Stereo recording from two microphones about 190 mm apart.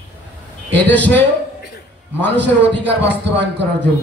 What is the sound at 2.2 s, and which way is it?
A man's voice, 65° right (ahead or behind).